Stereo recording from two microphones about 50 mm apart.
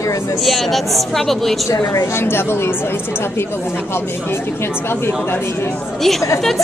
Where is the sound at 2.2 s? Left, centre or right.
Left.